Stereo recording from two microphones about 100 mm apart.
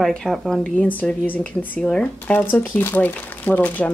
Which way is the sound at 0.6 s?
15° left (ahead or behind).